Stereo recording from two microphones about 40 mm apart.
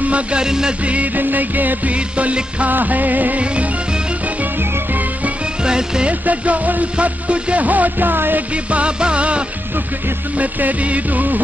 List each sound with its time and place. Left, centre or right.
0.0 s music: right
0.4 s music: centre
1.1 s music: right
2.1 s music: right
2.7 s music: right
5.6 s speech: centre
6.2 s music: right
8.7 s music: right